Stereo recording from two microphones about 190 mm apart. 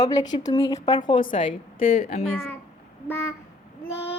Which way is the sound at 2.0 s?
40° left (ahead or behind).